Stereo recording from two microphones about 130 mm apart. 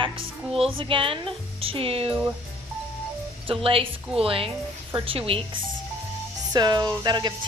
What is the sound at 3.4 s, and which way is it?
A woman's voice, 45° right (ahead or behind).